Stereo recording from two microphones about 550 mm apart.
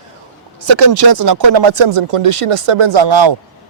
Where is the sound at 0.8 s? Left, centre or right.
Right.